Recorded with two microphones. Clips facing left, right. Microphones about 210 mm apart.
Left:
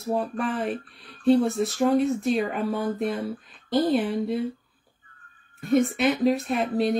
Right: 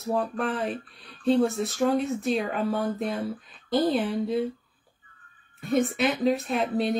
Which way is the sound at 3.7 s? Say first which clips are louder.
Left 1 dB; 50° left (ahead or behind).